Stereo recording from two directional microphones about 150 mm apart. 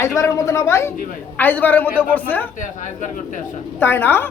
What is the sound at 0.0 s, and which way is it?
A woman's voice, 20° left (ahead or behind).